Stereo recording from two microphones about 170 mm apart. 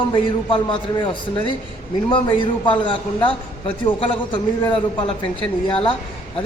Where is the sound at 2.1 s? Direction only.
30° left (ahead or behind).